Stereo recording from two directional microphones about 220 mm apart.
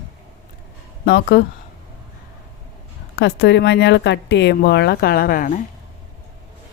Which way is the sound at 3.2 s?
50° left (ahead or behind).